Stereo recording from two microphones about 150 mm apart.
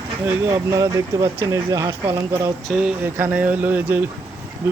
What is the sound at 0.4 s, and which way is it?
Speech, 20° right (ahead or behind).